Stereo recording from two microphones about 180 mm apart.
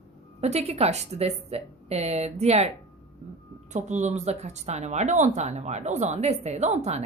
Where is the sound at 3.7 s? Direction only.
40° right (ahead or behind).